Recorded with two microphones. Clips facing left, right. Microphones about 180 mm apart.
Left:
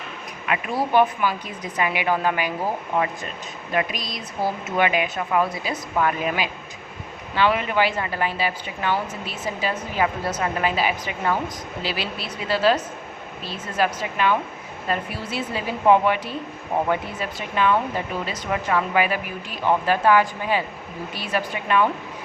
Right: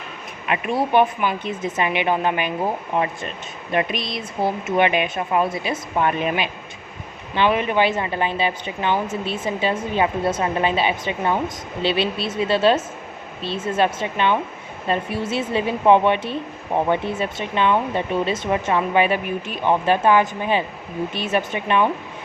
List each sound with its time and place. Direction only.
0.4 s speech: 25° right (ahead or behind)